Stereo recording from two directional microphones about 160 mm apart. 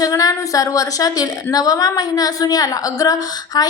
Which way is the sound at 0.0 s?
20° left (ahead or behind).